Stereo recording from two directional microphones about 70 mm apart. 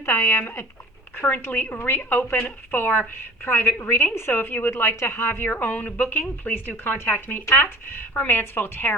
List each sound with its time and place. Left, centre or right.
0.0 s speech: left